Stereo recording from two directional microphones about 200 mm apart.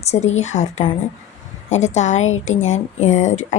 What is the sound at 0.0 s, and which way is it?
A woman's voice, 35° left (ahead or behind).